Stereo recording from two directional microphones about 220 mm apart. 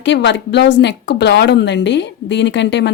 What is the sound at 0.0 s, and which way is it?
A woman's voice, 55° left (ahead or behind).